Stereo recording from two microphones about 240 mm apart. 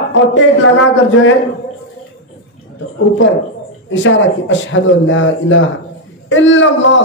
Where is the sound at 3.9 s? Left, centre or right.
Left.